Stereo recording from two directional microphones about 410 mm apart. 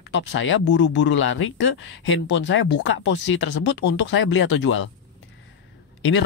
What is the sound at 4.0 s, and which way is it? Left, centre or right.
Speech, left.